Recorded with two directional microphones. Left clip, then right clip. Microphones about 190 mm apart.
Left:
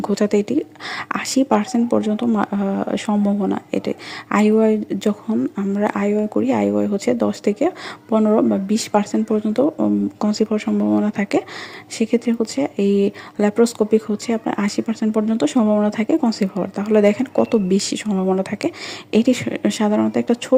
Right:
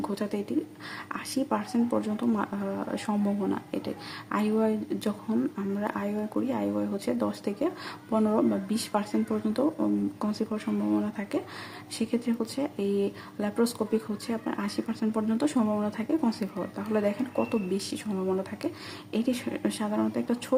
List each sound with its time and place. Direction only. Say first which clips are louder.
0.0 s speech: left 14 dB; 35° left (ahead or behind)